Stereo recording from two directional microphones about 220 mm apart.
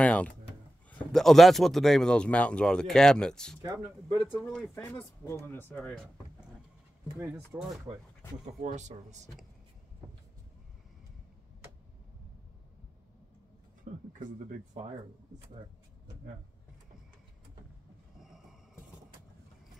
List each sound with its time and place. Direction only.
0.0 s speech: 5° left (ahead or behind)
3.6 s speech: 15° right (ahead or behind)
4.2 s speech: centre (ahead or behind)
4.7 s speech: 15° left (ahead or behind)
7.2 s speech: 5° right (ahead or behind)
8.6 s speech: 30° right (ahead or behind)
13.9 s speech: 35° right (ahead or behind)